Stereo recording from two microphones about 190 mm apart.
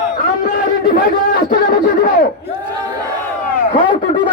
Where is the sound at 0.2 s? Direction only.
50° left (ahead or behind).